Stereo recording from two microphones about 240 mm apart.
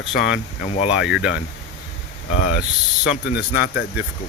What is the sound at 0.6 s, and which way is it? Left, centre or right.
Speech, left.